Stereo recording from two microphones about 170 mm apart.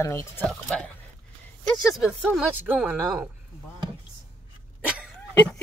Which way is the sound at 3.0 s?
Centre (ahead or behind).